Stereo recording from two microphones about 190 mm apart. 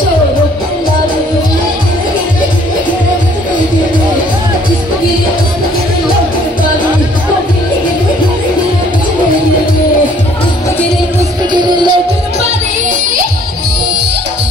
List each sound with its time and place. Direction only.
11.5 s music: 25° right (ahead or behind)